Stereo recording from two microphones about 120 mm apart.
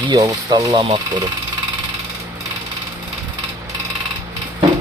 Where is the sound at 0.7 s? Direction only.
45° right (ahead or behind).